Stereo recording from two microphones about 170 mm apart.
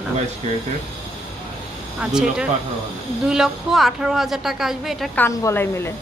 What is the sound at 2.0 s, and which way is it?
A woman's voice, 5° right (ahead or behind).